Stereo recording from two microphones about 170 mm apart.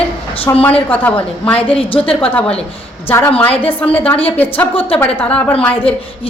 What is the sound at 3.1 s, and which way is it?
A woman's voice, 15° left (ahead or behind).